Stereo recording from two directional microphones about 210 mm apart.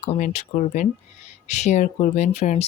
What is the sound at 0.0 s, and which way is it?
Speech, 30° left (ahead or behind).